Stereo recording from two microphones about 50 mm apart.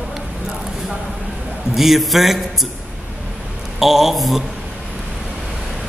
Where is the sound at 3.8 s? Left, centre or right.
Centre.